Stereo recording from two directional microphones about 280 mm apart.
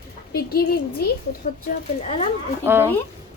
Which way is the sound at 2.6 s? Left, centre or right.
Centre.